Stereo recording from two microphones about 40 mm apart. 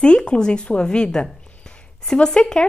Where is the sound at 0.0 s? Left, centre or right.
Left.